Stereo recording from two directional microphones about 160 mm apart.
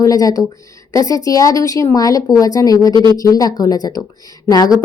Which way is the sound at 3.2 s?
20° left (ahead or behind).